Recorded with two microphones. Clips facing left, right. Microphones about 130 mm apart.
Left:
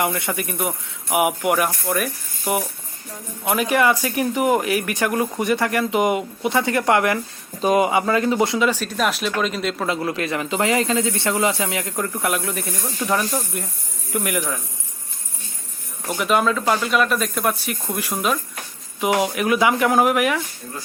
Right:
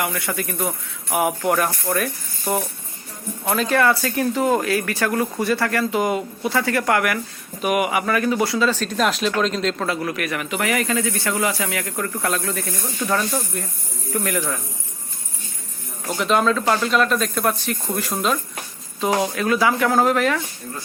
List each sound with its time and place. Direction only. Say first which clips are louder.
0.0 s speech: left 2 dB; 25° left (ahead or behind)
9.0 s speech: right 3 dB; centre (ahead or behind)
9.8 s speech: left 1 dB; 20° left (ahead or behind)
16.0 s speech: even; 5° left (ahead or behind)